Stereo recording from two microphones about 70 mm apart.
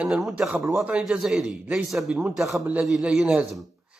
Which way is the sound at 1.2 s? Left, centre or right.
Centre.